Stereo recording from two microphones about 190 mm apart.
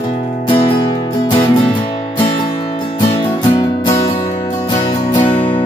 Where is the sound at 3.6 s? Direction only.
20° left (ahead or behind).